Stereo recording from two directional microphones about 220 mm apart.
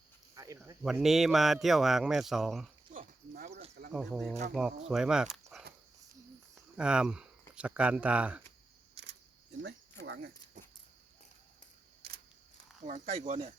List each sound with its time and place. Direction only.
0.3 s cricket: 15° right (ahead or behind)
0.8 s speech: centre (ahead or behind)
2.9 s horse: 35° right (ahead or behind)
3.9 s speech: centre (ahead or behind)
6.7 s speech: 5° right (ahead or behind)
9.0 s camera: 55° right (ahead or behind)
9.6 s a sound: 55° right (ahead or behind)
12.8 s speech: 30° right (ahead or behind)